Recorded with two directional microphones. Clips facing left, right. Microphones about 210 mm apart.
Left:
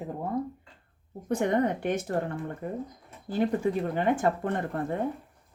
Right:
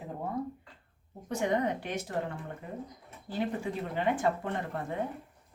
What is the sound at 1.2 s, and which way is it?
A woman's voice, 55° left (ahead or behind).